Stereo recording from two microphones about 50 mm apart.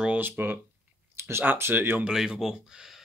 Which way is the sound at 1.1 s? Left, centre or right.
Right.